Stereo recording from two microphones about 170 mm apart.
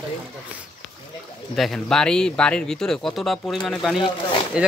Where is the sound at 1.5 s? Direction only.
Centre (ahead or behind).